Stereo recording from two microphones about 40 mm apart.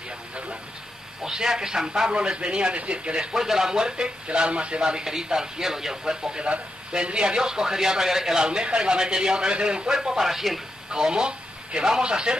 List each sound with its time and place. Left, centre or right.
1.2 s a man's voice: centre
3.3 s a man's voice: centre
5.1 s a man's voice: centre
6.4 s a man's voice: right
8.5 s a man's voice: right
9.9 s a man's voice: centre
10.9 s a man's voice: centre